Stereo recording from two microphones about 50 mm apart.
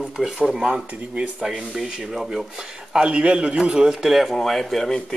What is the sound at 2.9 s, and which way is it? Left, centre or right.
A man's voice, centre.